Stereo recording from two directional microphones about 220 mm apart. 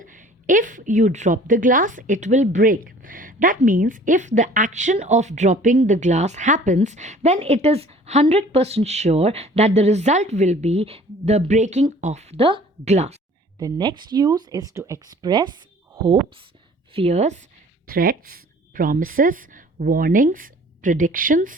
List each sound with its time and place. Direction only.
0.0 s a woman's voice: 35° right (ahead or behind)
13.6 s speech: 15° right (ahead or behind)
16.9 s a woman's voice: 30° right (ahead or behind)
17.8 s a woman's voice: 40° right (ahead or behind)